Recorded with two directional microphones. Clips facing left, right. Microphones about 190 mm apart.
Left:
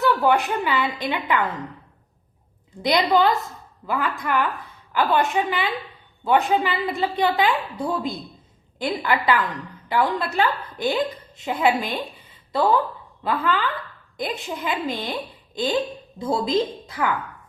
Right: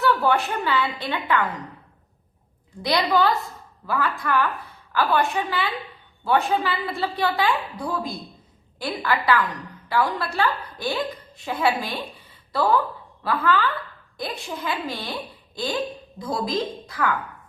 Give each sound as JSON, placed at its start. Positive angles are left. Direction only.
{"t": 0.0, "sound": "a woman's voice", "side_deg": 15}
{"t": 2.8, "sound": "a woman's voice", "side_deg": 20}